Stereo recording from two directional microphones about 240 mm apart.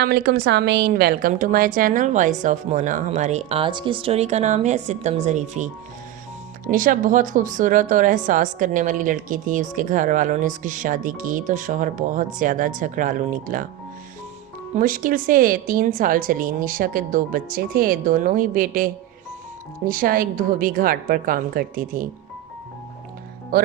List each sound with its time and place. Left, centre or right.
0.0 s speech: right
14.8 s speech: right
19.9 s speech: right